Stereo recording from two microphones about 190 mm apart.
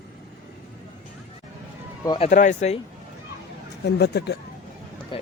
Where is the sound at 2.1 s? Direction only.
30° left (ahead or behind).